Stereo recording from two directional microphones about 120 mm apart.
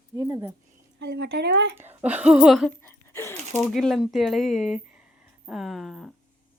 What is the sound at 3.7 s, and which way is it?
Speech, centre (ahead or behind).